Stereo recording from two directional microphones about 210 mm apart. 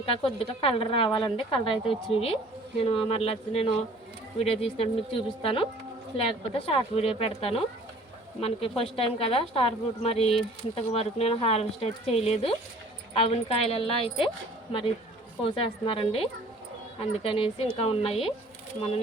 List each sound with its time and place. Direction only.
0.0 s speech: 25° left (ahead or behind)